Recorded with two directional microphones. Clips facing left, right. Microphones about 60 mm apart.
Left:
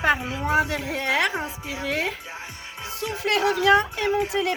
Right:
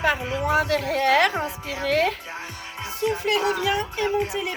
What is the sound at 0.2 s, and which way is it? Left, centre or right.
A woman's voice, centre.